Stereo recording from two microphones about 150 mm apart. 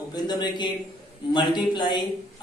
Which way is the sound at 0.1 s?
30° left (ahead or behind).